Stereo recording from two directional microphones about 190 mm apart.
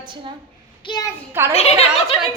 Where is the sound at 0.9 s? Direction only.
25° left (ahead or behind).